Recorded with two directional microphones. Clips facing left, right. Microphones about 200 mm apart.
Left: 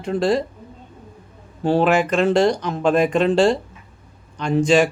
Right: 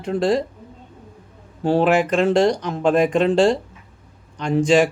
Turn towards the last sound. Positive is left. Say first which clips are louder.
# even
turn(degrees=-15)  # may be behind; listen again after turning